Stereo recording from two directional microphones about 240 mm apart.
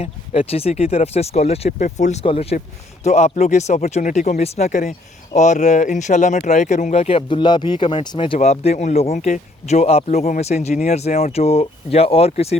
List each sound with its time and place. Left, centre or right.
0.0 s speech: left